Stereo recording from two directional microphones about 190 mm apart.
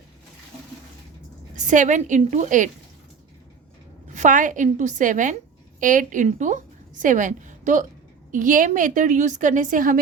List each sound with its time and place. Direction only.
1.5 s a woman's voice: 40° right (ahead or behind)
4.1 s a woman's voice: 40° right (ahead or behind)